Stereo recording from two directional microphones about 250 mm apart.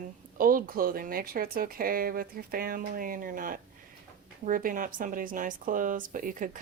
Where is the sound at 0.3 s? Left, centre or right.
Right.